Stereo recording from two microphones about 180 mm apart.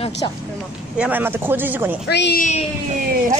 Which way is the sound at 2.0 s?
65° left (ahead or behind).